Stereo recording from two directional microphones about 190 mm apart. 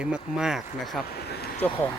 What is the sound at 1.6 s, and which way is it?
Speech, 10° left (ahead or behind).